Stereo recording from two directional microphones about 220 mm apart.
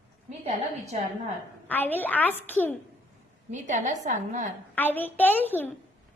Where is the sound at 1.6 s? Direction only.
10° left (ahead or behind).